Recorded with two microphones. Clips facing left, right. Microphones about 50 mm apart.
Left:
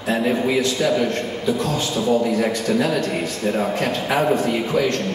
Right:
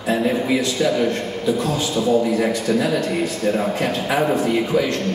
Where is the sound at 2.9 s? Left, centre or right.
Centre.